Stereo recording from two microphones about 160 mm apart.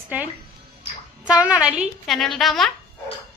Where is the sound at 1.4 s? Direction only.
5° right (ahead or behind).